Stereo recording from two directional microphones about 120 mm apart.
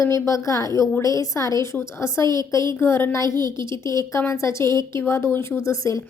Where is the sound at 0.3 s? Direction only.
25° left (ahead or behind).